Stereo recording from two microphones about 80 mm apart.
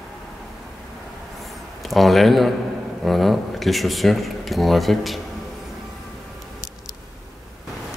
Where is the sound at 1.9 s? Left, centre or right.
Centre.